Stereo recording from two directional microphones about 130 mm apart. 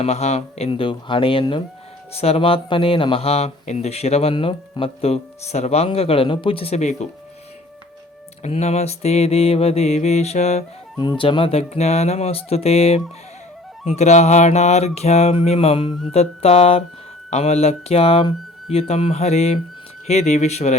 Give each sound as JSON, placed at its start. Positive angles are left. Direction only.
{"t": 0.0, "sound": "speech", "side_deg": 55}
{"t": 8.4, "sound": "mantra", "side_deg": 55}
{"t": 11.2, "sound": "speech", "side_deg": 40}
{"t": 13.8, "sound": "mantra", "side_deg": 60}
{"t": 16.1, "sound": "speech", "side_deg": 55}
{"t": 20.1, "sound": "mantra", "side_deg": 60}